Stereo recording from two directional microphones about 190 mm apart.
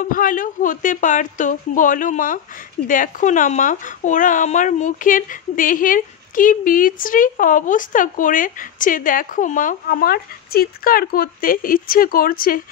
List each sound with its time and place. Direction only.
0.0 s speech: 45° left (ahead or behind)